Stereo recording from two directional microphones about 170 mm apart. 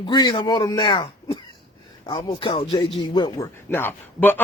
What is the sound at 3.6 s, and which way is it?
Speech, 15° left (ahead or behind).